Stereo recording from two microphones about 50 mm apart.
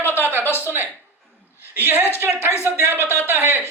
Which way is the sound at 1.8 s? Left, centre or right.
Right.